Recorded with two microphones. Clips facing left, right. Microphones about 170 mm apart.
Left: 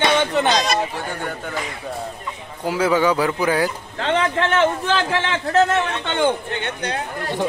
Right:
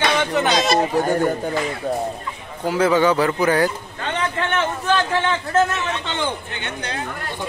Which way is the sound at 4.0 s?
90° left.